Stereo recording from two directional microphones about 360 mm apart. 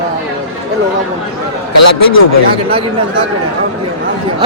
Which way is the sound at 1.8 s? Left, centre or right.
Left.